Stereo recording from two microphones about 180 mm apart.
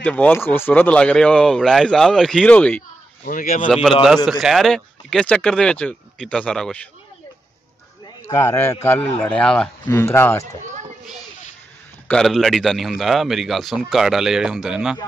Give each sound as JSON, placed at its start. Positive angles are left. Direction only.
{"t": 0.0, "sound": "speech", "side_deg": 10}
{"t": 3.3, "sound": "speech", "side_deg": 45}
{"t": 3.6, "sound": "speech", "side_deg": 0}
{"t": 8.2, "sound": "a man's voice", "side_deg": 15}
{"t": 10.6, "sound": "children playing", "side_deg": -45}
{"t": 12.1, "sound": "speech", "side_deg": 0}